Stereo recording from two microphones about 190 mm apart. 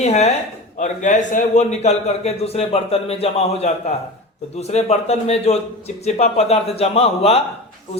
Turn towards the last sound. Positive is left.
turn(degrees=30)  # may be behind; listen again after turning